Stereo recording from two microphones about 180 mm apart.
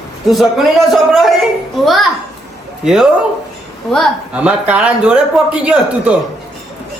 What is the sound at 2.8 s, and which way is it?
A man's voice, 5° right (ahead or behind).